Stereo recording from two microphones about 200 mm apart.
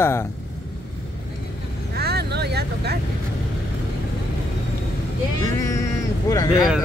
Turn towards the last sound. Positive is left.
turn(degrees=15)  # may be behind; listen again after turning